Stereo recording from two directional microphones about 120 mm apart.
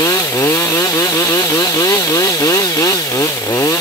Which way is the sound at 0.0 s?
25° left (ahead or behind).